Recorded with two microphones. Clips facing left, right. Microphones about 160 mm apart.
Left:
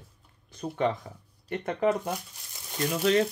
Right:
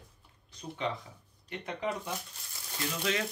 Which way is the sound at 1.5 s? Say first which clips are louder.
Left 9 dB; 50° left (ahead or behind).